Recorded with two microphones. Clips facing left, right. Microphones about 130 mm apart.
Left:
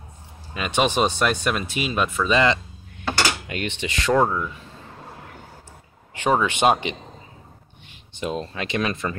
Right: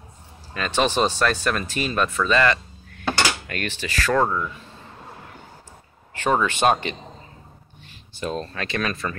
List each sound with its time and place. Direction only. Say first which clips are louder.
0.6 s speech: even; 15° left (ahead or behind)
6.1 s speech: left 1 dB; 15° left (ahead or behind)